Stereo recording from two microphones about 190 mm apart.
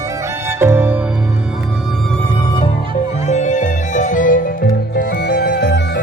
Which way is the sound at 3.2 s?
40° left (ahead or behind).